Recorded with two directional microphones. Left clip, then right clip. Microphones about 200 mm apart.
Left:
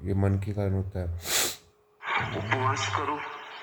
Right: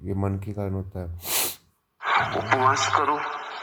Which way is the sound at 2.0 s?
45° right (ahead or behind).